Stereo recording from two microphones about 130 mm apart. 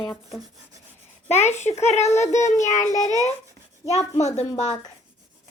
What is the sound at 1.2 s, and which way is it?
Speech, 60° left (ahead or behind).